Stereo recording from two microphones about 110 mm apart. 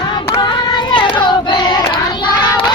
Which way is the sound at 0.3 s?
40° left (ahead or behind).